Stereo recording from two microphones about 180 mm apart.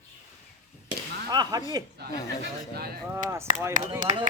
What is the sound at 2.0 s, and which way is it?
Speech, 65° right (ahead or behind).